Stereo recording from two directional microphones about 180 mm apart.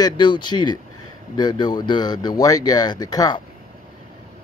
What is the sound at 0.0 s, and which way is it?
Speech, 25° left (ahead or behind).